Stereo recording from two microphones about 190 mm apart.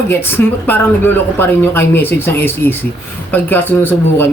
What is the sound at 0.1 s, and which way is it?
Speech, 10° left (ahead or behind).